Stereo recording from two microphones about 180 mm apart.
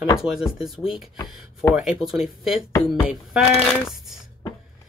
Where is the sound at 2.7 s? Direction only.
15° left (ahead or behind).